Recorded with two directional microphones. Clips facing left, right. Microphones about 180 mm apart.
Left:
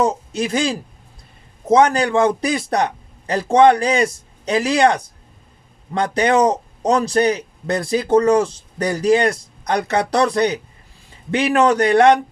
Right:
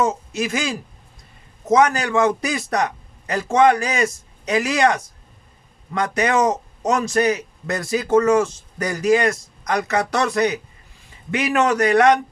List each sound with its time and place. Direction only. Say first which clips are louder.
0.0 s speech: left 2 dB; 30° left (ahead or behind)